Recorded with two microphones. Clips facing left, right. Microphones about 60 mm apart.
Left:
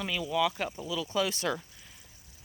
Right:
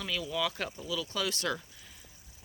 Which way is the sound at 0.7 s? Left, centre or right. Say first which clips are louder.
Left 4 dB; left.